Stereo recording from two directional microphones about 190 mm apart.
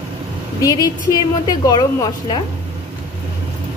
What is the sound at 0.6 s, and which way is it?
Speech, 20° left (ahead or behind).